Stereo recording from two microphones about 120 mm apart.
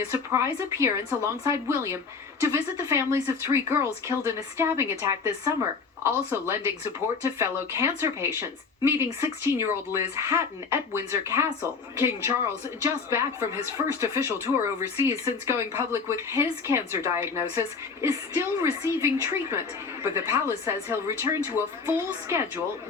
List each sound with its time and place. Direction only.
0.0 s speech: 25° right (ahead or behind)